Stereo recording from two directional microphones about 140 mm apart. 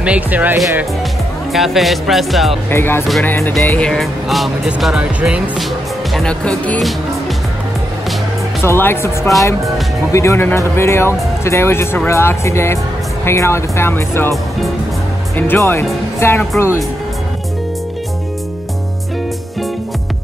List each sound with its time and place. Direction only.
0.0 s speech: 10° right (ahead or behind)
1.5 s speech: centre (ahead or behind)
2.7 s speech: 15° left (ahead or behind); by 5.7 s 5° right (ahead or behind)
6.1 s speech: 5° left (ahead or behind)
8.6 s speech: 15° left (ahead or behind)
15.3 s speech: 15° left (ahead or behind)